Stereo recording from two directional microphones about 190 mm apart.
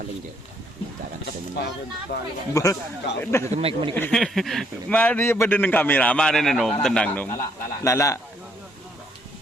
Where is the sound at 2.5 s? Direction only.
15° left (ahead or behind).